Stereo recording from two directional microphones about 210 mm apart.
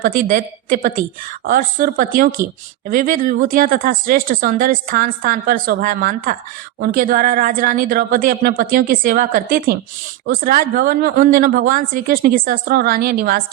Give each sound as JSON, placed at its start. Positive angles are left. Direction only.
{"t": 0.0, "sound": "a woman's voice", "side_deg": -40}